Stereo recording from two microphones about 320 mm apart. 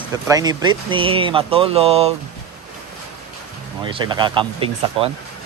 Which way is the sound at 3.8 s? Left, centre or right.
Centre.